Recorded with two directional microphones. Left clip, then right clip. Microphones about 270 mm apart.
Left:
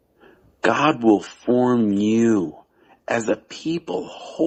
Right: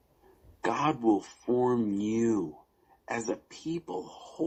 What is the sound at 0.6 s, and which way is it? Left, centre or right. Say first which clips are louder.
Speech: left 10 dB; left.